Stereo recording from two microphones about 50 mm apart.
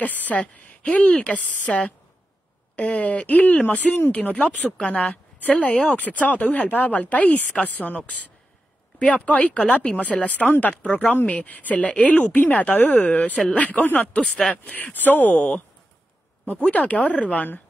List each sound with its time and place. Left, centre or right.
0.0 s speech: left
0.4 s speech: left
9.0 s speech: left
14.1 s speech: centre
14.7 s speech: left
16.7 s speech: left